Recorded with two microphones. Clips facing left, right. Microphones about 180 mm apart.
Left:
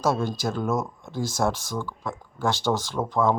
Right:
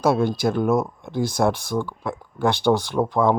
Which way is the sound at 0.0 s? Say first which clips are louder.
Right 5 dB; 60° right (ahead or behind).